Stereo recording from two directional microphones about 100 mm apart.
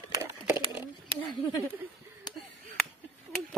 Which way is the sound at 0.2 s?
25° right (ahead or behind).